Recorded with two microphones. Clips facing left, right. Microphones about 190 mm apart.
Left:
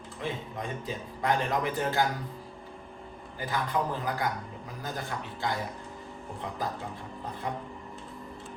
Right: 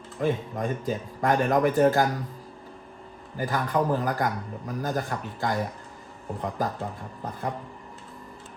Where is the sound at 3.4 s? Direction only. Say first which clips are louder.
Right 5 dB; 45° right (ahead or behind).